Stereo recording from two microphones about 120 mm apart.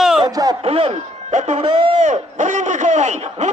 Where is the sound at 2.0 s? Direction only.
90° right.